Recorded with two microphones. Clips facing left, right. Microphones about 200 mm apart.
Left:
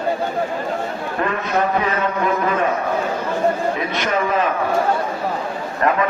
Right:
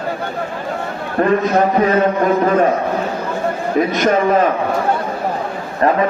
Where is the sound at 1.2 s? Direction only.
40° right (ahead or behind).